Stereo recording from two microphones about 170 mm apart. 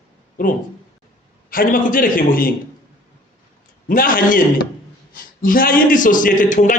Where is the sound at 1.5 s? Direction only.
55° left (ahead or behind).